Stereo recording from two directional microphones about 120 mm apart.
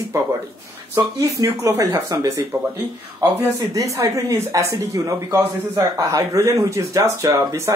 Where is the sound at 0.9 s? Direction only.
25° right (ahead or behind).